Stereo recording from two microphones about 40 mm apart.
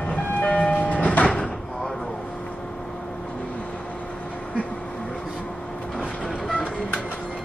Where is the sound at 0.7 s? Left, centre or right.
Left.